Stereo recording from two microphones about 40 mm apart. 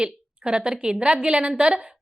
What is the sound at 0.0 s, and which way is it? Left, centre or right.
A woman's voice, right.